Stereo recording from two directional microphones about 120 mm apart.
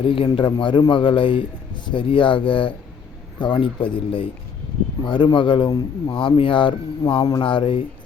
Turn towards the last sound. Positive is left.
turn(degrees=45)  # may be behind; listen again after turning